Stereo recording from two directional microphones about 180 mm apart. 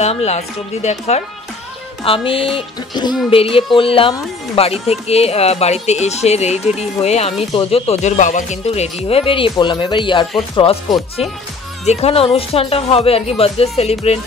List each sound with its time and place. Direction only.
0.0 s a woman's voice: 35° left (ahead or behind)
2.0 s music: 30° left (ahead or behind)
3.3 s a woman's voice: 30° left (ahead or behind)
10.5 s music: 25° left (ahead or behind)
11.8 s a woman's voice: 35° left (ahead or behind)